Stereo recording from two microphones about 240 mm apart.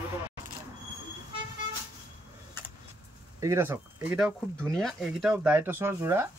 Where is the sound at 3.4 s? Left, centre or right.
Centre.